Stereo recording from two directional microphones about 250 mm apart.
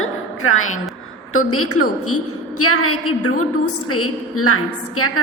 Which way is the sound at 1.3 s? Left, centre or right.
Left.